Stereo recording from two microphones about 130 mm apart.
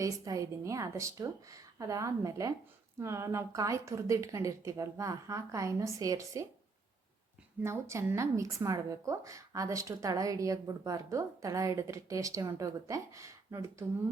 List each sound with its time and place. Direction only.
0.0 s a woman's voice: 25° right (ahead or behind)
7.6 s a woman's voice: 20° right (ahead or behind)